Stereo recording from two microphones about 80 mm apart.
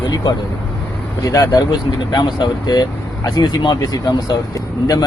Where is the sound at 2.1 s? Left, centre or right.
Left.